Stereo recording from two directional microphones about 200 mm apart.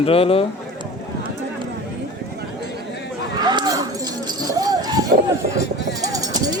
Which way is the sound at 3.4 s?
20° right (ahead or behind).